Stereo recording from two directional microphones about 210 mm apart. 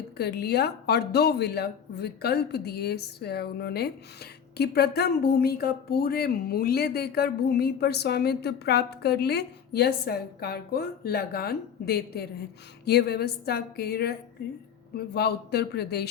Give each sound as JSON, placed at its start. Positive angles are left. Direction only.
{"t": 0.2, "sound": "speech", "side_deg": 50}